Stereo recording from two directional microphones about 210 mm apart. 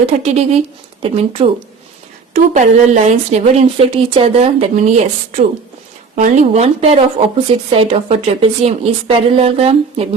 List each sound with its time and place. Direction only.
0.0 s a woman's voice: 30° right (ahead or behind)
6.1 s a woman's voice: 35° right (ahead or behind)